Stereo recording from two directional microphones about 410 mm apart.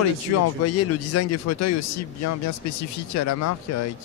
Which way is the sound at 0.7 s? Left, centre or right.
Left.